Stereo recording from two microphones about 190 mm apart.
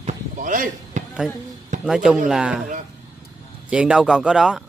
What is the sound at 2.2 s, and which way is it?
Speech, 5° right (ahead or behind).